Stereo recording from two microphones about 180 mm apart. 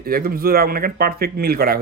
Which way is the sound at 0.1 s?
55° right (ahead or behind).